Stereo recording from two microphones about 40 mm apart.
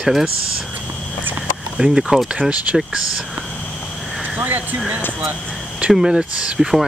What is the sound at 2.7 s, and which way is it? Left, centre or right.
Speech, right.